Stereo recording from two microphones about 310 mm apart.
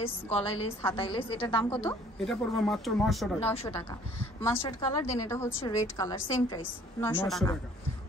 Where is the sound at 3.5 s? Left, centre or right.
Centre.